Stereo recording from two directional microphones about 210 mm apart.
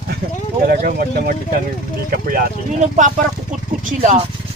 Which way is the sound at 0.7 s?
45° right (ahead or behind).